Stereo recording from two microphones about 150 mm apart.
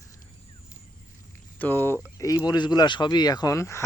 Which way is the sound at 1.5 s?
10° left (ahead or behind).